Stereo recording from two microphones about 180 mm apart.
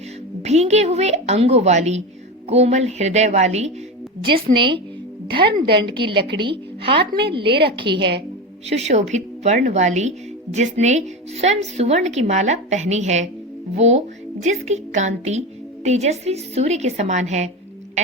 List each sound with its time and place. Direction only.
0.4 s speech: 35° right (ahead or behind)
4.2 s a woman's voice: 25° right (ahead or behind)
8.7 s speech: 40° right (ahead or behind)